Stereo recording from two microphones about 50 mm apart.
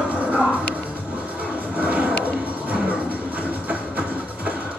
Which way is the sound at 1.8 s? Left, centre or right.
Right.